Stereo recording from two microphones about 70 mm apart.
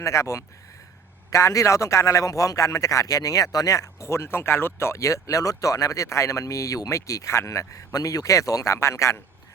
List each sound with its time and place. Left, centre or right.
0.0 s a man's voice: left